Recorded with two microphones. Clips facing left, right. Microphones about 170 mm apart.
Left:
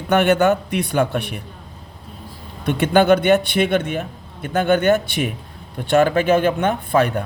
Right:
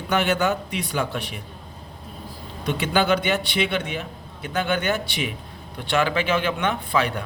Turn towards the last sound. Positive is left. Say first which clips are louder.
# left 6 dB
turn(degrees=50)  # may be behind; listen again after turning